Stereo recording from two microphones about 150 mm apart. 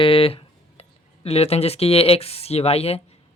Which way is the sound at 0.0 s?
40° left (ahead or behind).